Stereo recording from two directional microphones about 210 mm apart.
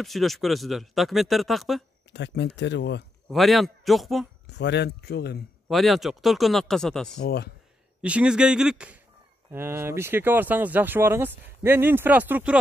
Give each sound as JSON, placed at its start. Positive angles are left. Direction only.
{"t": 0.0, "sound": "speech", "side_deg": 0}
{"t": 2.1, "sound": "speech", "side_deg": 55}
{"t": 3.3, "sound": "speech", "side_deg": 0}
{"t": 4.5, "sound": "speech", "side_deg": 55}
{"t": 5.7, "sound": "speech", "side_deg": 0}
{"t": 7.2, "sound": "speech", "side_deg": 50}
{"t": 8.0, "sound": "speech", "side_deg": -5}